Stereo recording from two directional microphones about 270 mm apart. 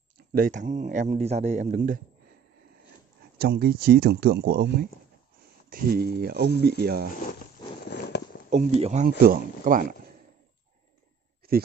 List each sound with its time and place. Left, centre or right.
0.3 s speech: right
3.3 s speech: right
7.9 s walk: left
8.5 s speech: right
11.4 s a sound: right